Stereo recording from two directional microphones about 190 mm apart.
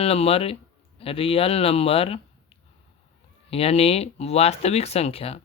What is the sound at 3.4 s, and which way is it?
Speech, 30° left (ahead or behind).